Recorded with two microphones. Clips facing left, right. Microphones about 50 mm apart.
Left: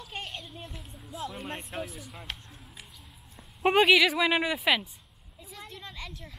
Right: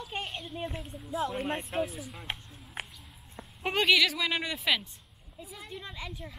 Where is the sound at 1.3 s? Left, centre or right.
Right.